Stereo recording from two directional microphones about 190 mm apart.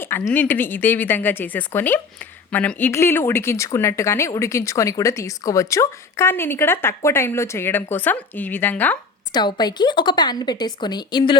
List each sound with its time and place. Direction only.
0.0 s a woman's voice: 10° left (ahead or behind)
9.3 s a woman's voice: 25° left (ahead or behind)